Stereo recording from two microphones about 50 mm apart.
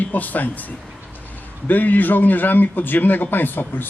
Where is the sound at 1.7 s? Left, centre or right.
Left.